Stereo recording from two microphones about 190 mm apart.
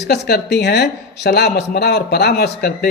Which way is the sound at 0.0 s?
60° left (ahead or behind).